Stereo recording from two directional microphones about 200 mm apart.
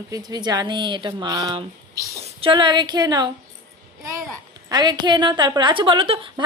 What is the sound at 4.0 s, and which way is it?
Babbling, 15° right (ahead or behind).